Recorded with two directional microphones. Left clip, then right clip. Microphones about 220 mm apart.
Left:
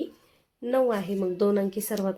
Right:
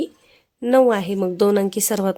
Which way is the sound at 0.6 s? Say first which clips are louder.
Right 9 dB; 45° right (ahead or behind).